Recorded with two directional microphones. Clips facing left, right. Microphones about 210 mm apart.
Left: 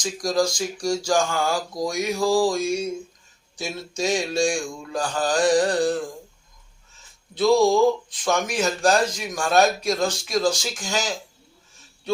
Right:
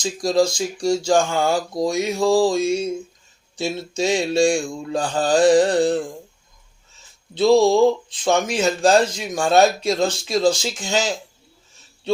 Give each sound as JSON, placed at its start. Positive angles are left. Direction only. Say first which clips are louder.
{"t": 0.0, "sound": "speech", "louder": "right 4 dB", "side_deg": -25}
{"t": 7.3, "sound": "speech", "louder": "right 3 dB", "side_deg": -25}